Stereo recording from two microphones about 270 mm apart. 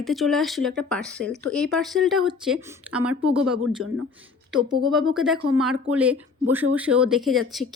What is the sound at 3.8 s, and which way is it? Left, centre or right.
Speech, right.